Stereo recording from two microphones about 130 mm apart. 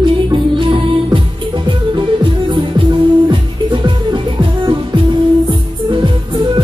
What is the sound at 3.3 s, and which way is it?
Music, 40° right (ahead or behind).